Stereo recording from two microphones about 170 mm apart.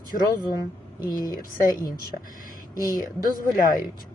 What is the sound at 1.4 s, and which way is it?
Speech, 55° left (ahead or behind).